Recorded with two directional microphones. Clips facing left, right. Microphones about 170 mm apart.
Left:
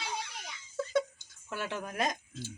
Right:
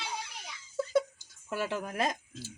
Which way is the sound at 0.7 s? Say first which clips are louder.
Right 2 dB; 10° right (ahead or behind).